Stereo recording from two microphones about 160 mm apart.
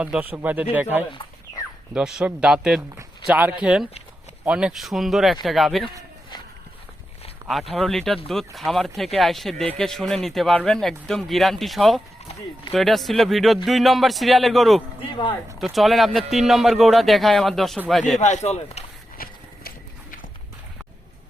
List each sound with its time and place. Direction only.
0.0 s speech: 10° right (ahead or behind)
1.1 s a sound: 30° left (ahead or behind)
1.9 s speech: 5° right (ahead or behind)
7.8 s speech: centre (ahead or behind)
18.2 s speech: 50° left (ahead or behind)
19.1 s horse: 65° left (ahead or behind)